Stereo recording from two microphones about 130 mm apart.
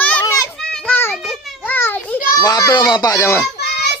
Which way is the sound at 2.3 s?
30° left (ahead or behind).